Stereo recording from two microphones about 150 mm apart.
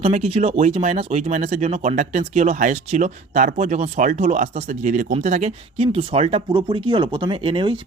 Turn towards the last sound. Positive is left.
turn(degrees=-35)  # may be behind; listen again after turning